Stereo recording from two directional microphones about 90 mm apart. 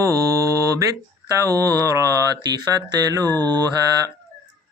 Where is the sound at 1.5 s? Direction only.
40° right (ahead or behind).